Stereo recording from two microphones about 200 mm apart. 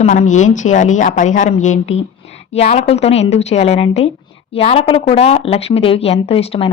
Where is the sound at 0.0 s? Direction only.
35° left (ahead or behind).